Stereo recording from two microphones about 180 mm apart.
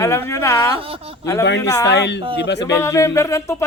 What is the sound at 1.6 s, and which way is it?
Speech, 15° left (ahead or behind).